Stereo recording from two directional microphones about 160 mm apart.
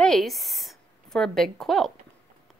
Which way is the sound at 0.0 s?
Centre (ahead or behind).